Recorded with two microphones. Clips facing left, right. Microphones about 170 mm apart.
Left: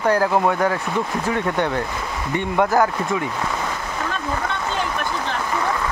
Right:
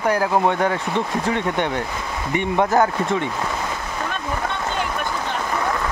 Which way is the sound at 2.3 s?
20° right (ahead or behind).